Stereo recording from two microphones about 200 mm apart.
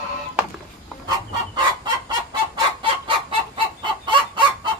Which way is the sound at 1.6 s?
25° right (ahead or behind).